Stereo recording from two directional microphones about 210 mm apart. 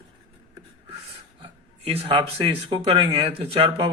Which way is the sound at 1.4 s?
25° right (ahead or behind).